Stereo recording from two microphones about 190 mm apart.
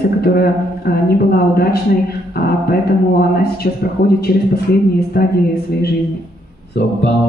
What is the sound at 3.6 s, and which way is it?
Speech, 55° left (ahead or behind).